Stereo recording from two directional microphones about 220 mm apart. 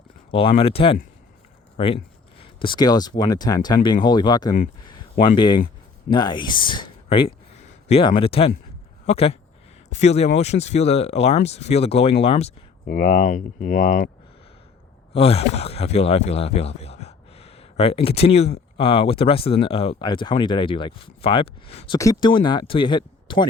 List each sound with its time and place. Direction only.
0.3 s speech: 25° left (ahead or behind)
7.3 s a sound: 30° left (ahead or behind)
9.0 s speech: 25° left (ahead or behind)
12.8 s speech: 40° left (ahead or behind)
15.1 s speech: 25° left (ahead or behind)
21.9 s speech: 15° left (ahead or behind)